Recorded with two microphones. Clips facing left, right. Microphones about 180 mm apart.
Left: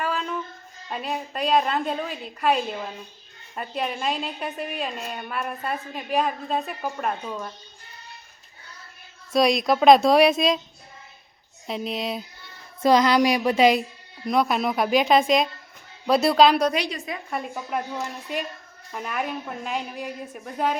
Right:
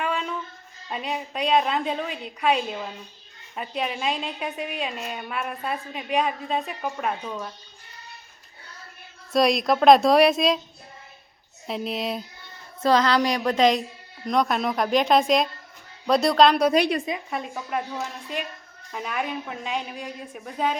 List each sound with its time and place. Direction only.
0.0 s a sound: centre (ahead or behind)
0.9 s a woman's voice: centre (ahead or behind)
9.3 s a woman's voice: centre (ahead or behind)
11.6 s a woman's voice: centre (ahead or behind)
12.8 s a sound: 15° left (ahead or behind)
14.3 s a woman's voice: 5° left (ahead or behind)
16.7 s a woman's voice: 60° right (ahead or behind)
17.2 s a woman's voice: centre (ahead or behind)